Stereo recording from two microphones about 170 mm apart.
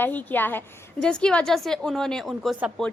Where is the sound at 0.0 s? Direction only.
10° left (ahead or behind).